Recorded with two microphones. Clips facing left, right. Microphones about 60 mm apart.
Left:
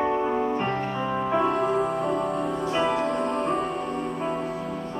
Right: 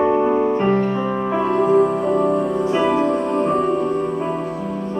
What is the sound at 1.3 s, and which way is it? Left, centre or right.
Music, centre.